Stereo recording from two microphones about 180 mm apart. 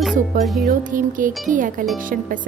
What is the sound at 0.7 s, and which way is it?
Speech, 50° right (ahead or behind).